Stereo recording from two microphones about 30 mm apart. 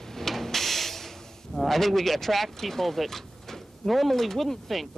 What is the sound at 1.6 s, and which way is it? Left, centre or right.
Speech, centre.